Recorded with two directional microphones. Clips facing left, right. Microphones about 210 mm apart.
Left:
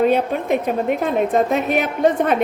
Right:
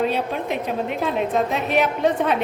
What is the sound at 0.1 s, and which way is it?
A woman's voice, 50° left (ahead or behind).